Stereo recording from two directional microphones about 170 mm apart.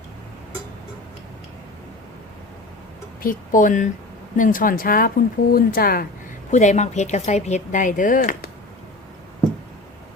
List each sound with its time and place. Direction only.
3.2 s speech: 50° left (ahead or behind)
6.5 s speech: 45° left (ahead or behind)